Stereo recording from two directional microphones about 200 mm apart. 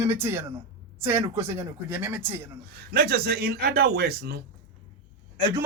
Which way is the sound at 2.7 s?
50° right (ahead or behind).